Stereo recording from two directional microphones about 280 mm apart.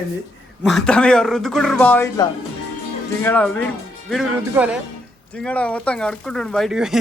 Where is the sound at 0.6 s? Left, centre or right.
Centre.